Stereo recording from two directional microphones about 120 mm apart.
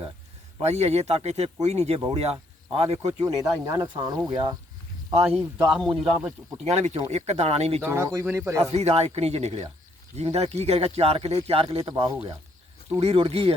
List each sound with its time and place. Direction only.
0.6 s speech: 65° right (ahead or behind)
3.7 s speech: 35° right (ahead or behind)
5.4 s speech: 5° right (ahead or behind)
6.7 s speech: 70° right (ahead or behind)
7.9 s speech: 20° right (ahead or behind)
8.7 s speech: 60° right (ahead or behind)